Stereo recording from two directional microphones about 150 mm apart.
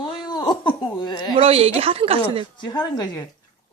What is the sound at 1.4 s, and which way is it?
Speech, 40° right (ahead or behind).